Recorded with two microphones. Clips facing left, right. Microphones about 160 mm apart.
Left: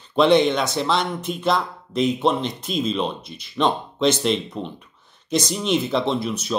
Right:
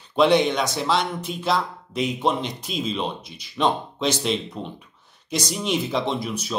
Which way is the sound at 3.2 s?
55° left (ahead or behind).